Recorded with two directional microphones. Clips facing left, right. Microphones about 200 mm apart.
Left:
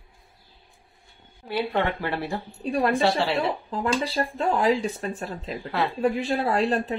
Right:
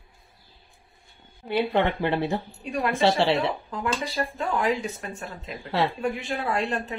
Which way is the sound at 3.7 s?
30° left (ahead or behind).